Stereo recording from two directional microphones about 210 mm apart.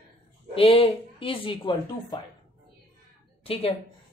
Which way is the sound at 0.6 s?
25° left (ahead or behind).